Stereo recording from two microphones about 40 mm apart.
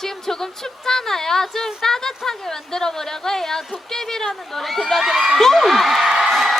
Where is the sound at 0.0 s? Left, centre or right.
Centre.